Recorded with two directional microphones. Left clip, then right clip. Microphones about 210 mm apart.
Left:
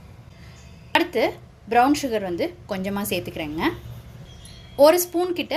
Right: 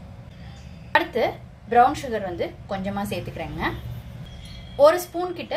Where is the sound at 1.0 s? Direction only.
45° left (ahead or behind).